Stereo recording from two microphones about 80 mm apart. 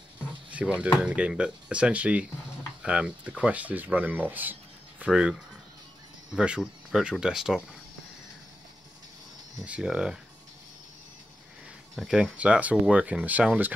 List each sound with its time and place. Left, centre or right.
0.7 s speech: centre
5.1 s speech: centre
9.7 s speech: centre
11.9 s speech: centre
12.4 s speech: centre